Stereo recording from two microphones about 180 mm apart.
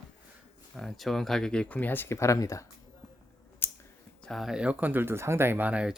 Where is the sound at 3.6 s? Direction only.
10° left (ahead or behind).